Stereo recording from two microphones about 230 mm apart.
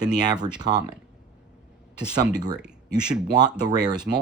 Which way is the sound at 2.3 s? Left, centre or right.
Centre.